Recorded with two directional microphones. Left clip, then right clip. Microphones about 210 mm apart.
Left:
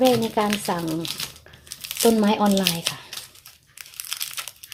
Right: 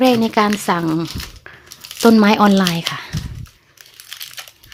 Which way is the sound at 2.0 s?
40° right (ahead or behind).